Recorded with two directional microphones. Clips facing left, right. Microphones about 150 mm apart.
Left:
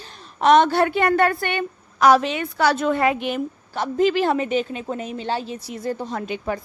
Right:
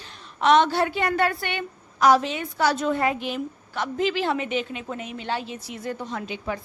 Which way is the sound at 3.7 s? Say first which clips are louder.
Left 6 dB; 40° left (ahead or behind).